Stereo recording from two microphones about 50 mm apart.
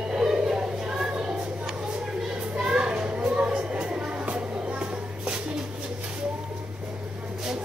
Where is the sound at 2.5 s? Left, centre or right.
Centre.